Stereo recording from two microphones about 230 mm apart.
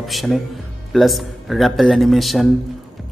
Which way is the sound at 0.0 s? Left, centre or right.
Centre.